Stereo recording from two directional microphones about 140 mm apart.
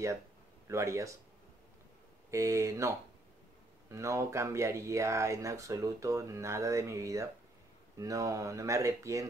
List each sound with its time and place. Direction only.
0.7 s speech: 20° right (ahead or behind)
2.3 s speech: 20° right (ahead or behind)